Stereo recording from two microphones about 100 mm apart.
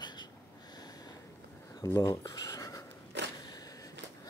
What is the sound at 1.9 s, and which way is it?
Speech, 40° left (ahead or behind).